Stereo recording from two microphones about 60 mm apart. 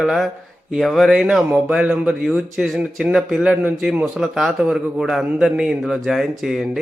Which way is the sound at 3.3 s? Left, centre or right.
Centre.